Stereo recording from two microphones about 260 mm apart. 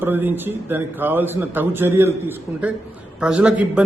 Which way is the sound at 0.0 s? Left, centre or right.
Centre.